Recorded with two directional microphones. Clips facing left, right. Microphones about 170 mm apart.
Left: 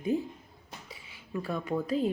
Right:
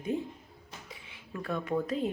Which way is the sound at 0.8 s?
Centre (ahead or behind).